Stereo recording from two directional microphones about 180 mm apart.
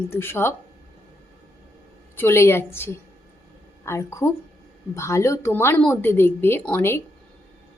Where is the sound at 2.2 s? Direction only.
15° left (ahead or behind).